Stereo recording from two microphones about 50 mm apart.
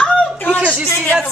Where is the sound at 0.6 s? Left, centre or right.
Right.